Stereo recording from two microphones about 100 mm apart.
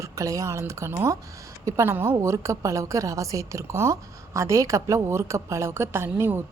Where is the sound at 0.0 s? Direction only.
30° right (ahead or behind).